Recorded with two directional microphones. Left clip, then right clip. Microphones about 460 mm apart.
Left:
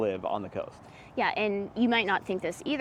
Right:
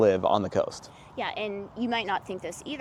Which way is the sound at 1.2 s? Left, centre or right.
Left.